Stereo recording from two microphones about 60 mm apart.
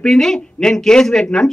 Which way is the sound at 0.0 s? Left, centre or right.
Centre.